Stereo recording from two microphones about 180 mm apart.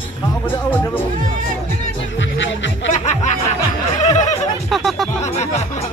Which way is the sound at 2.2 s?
90° left.